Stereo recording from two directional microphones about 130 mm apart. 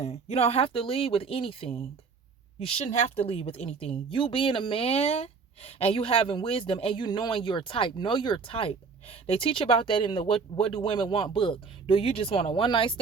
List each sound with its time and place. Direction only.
0.0 s a woman's voice: 55° left (ahead or behind); by 13.0 s 40° left (ahead or behind)